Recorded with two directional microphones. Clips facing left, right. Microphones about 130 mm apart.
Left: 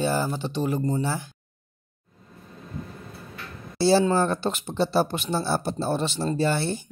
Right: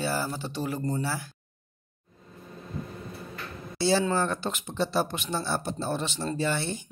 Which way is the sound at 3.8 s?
35° left (ahead or behind).